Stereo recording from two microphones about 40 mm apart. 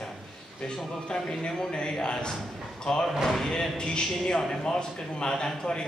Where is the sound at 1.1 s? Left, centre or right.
Centre.